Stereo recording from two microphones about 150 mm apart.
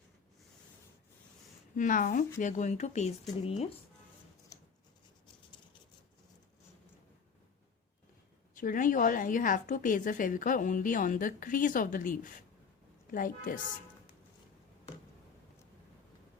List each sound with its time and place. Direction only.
1.7 s a woman's voice: 60° left (ahead or behind); by 3.7 s 45° left (ahead or behind)
8.5 s a woman's voice: 65° left (ahead or behind)